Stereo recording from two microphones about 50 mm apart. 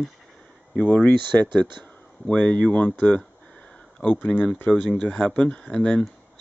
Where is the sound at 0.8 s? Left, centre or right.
Left.